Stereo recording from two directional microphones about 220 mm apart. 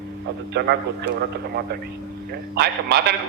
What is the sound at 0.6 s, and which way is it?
Speech, 50° right (ahead or behind).